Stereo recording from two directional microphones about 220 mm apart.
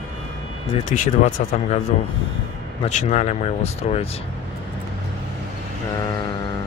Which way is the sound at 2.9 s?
30° left (ahead or behind).